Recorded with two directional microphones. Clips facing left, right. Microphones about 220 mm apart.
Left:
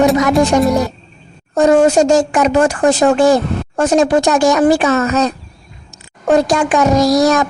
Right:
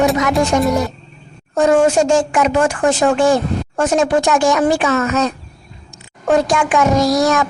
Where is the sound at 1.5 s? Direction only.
40° left (ahead or behind).